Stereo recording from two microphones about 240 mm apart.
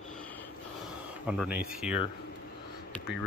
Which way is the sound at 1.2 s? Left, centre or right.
Centre.